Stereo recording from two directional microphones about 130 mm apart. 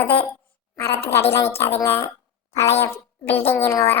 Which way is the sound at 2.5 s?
55° left (ahead or behind).